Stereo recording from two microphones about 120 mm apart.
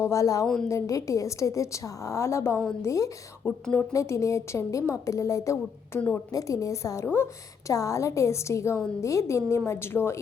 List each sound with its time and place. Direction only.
0.0 s a woman's voice: 25° left (ahead or behind)
3.4 s speech: 15° left (ahead or behind)
3.9 s a woman's voice: 25° left (ahead or behind)
6.3 s a woman's voice: 30° left (ahead or behind)